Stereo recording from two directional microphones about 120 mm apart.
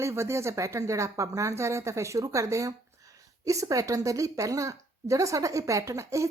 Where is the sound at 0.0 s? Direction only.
20° right (ahead or behind).